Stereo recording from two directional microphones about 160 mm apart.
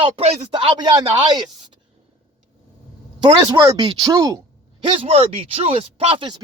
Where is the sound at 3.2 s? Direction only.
30° right (ahead or behind).